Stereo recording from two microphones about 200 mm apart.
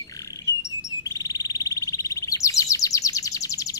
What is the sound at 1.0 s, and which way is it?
Chirp, 15° left (ahead or behind).